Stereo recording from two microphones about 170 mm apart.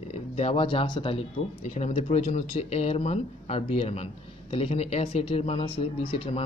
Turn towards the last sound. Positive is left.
turn(degrees=30)  # may be behind; listen again after turning